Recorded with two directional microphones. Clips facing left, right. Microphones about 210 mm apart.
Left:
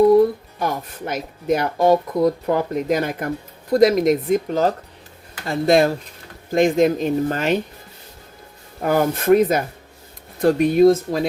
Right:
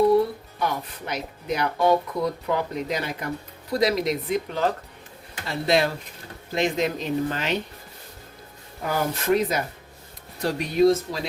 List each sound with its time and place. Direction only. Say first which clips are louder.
0.6 s speech: left 3 dB; 50° left (ahead or behind)
8.8 s speech: left 7 dB; 55° left (ahead or behind)